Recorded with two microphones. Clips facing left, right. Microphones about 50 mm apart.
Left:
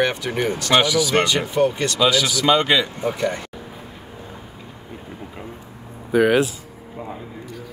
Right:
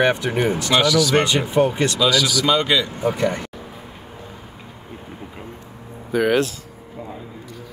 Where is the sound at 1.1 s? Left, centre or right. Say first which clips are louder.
Right 2 dB; centre.